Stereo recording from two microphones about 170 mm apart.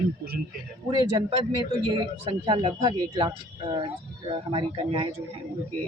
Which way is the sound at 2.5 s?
25° right (ahead or behind).